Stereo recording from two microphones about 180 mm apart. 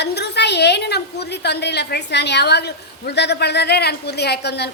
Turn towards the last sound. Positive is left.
turn(degrees=65)  # may be behind; listen again after turning